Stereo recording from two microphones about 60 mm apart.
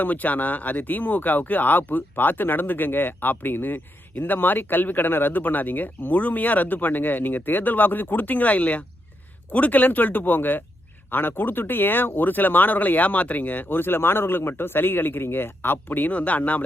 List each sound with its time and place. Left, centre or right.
0.0 s speech: left